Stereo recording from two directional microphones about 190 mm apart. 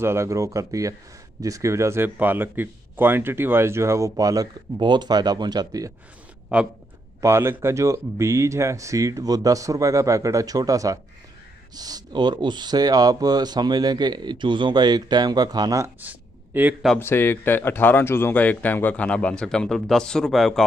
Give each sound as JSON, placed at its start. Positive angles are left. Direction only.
{"t": 0.0, "sound": "speech", "side_deg": -15}
{"t": 6.5, "sound": "speech", "side_deg": -5}
{"t": 16.9, "sound": "speech", "side_deg": 10}